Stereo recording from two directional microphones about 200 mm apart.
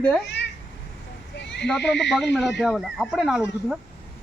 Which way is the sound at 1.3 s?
60° left (ahead or behind).